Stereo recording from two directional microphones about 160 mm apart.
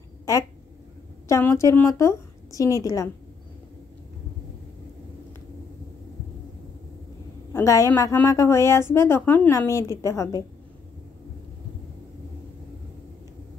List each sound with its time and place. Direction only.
0.2 s a sound: 20° left (ahead or behind)
1.3 s a woman's voice: 15° left (ahead or behind)
7.5 s a woman's voice: 20° left (ahead or behind)